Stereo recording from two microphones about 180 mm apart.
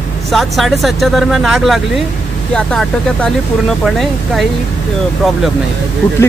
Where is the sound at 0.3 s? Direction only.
Centre (ahead or behind).